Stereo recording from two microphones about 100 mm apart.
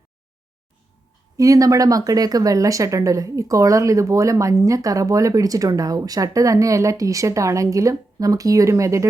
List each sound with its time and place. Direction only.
1.4 s speech: 35° right (ahead or behind)